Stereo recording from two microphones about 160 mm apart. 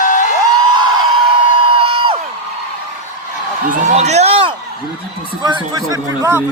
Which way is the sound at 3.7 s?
50° right (ahead or behind).